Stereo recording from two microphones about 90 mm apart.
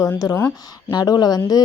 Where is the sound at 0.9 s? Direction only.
45° left (ahead or behind).